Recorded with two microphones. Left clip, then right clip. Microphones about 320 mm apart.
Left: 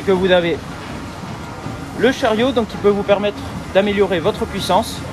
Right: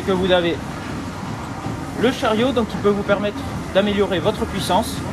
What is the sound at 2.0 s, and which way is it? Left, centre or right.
Speech, centre.